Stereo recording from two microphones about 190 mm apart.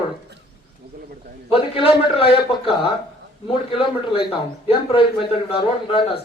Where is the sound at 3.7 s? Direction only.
30° left (ahead or behind).